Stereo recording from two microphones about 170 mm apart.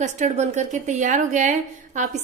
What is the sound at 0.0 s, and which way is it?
A woman's voice, 45° right (ahead or behind).